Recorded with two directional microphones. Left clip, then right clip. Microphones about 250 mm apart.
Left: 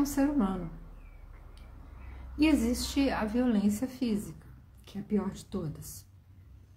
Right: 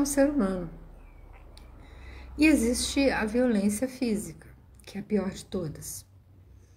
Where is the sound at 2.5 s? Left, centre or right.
Centre.